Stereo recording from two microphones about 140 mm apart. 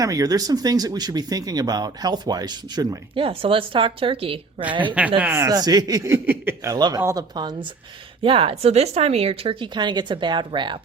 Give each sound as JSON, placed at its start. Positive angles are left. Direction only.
{"t": 0.0, "sound": "speech", "side_deg": -25}
{"t": 4.9, "sound": "speech", "side_deg": -10}
{"t": 5.5, "sound": "speech", "side_deg": -25}
{"t": 6.2, "sound": "speech", "side_deg": -15}
{"t": 8.2, "sound": "speech", "side_deg": -40}